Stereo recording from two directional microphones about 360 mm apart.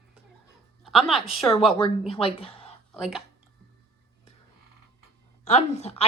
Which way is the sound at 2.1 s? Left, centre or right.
Centre.